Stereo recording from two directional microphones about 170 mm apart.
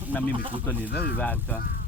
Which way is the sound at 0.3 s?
30° right (ahead or behind).